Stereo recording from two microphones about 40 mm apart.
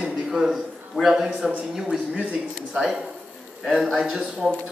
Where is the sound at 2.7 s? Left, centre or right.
Centre.